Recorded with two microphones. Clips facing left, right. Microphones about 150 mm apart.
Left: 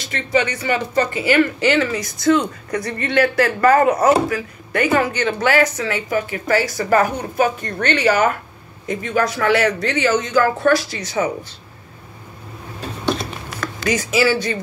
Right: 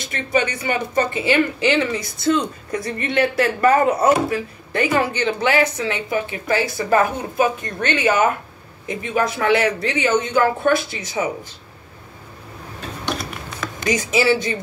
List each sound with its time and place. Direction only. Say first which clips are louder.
0.4 s speech: left 1 dB; 20° right (ahead or behind)
13.7 s speech: left 1 dB; 20° right (ahead or behind)